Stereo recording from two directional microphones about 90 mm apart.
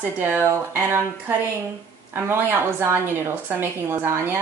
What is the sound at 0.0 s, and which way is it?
Speech, 25° right (ahead or behind).